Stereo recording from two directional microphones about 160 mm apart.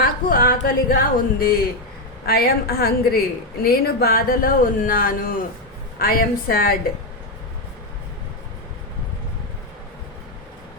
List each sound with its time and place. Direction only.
0.0 s a woman's voice: 60° left (ahead or behind)